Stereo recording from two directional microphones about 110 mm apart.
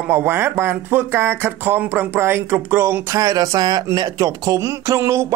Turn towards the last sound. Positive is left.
turn(degrees=-25)  # may be behind; listen again after turning